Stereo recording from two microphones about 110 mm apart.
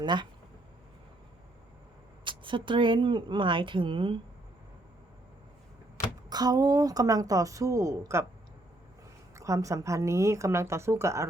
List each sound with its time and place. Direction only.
0.0 s speech: 45° right (ahead or behind)
2.2 s speech: 50° right (ahead or behind)
6.3 s a woman's voice: 35° right (ahead or behind)
9.3 s a woman's voice: 30° right (ahead or behind)